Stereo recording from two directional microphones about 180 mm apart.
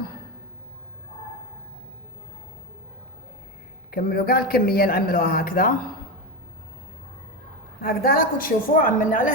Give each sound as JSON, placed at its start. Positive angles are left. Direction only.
{"t": 3.9, "sound": "a man's voice", "side_deg": 55}
{"t": 7.8, "sound": "a woman's voice", "side_deg": 55}